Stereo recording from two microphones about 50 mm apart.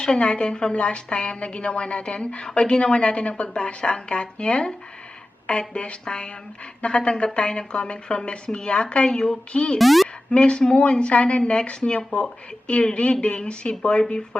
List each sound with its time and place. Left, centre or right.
0.0 s speech: left
9.7 s a woman's voice: centre
10.3 s speech: left